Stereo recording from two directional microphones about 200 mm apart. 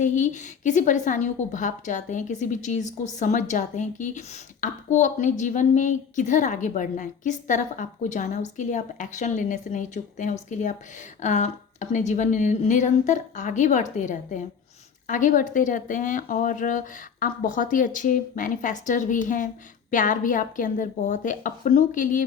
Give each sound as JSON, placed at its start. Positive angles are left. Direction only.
{"t": 0.0, "sound": "a woman's voice", "side_deg": 40}